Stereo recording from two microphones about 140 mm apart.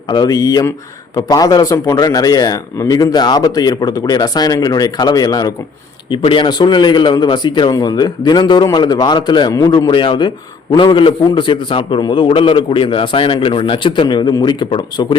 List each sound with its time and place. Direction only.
0.1 s a man's voice: 30° left (ahead or behind)